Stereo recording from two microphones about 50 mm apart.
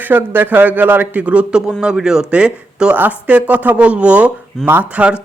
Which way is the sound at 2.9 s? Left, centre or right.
Right.